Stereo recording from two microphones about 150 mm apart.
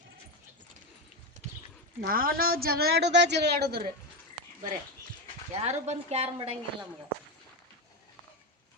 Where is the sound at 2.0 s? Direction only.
80° right.